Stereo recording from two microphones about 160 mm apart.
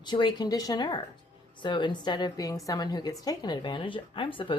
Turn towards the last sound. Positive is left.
turn(degrees=30)  # may be behind; listen again after turning